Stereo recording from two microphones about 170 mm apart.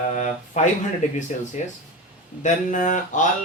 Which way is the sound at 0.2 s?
45° left (ahead or behind).